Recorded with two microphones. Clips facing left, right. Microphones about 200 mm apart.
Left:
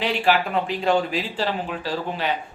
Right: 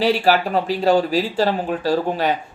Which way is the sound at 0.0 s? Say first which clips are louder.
Right 4 dB; 40° right (ahead or behind).